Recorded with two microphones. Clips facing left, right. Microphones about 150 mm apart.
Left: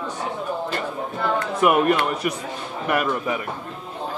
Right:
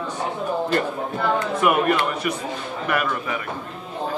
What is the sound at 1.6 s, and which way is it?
Speech, centre (ahead or behind).